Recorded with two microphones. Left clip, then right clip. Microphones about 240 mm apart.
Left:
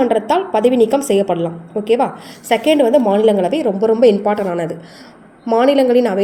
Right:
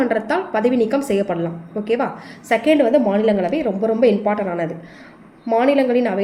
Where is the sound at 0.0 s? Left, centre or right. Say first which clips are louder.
Left 5 dB; left.